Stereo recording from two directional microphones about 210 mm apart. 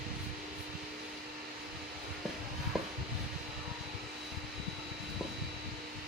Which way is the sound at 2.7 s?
Centre (ahead or behind).